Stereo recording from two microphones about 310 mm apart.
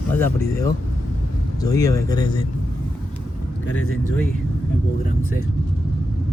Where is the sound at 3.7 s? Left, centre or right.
Left.